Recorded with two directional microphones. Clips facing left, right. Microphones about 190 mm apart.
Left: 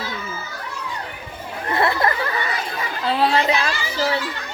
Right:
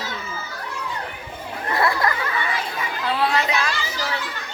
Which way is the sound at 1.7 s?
25° left (ahead or behind).